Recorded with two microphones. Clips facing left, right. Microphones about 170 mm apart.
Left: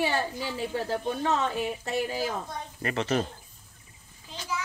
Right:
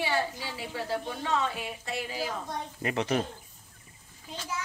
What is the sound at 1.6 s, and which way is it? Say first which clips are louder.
Speech: left 7 dB; 40° left (ahead or behind).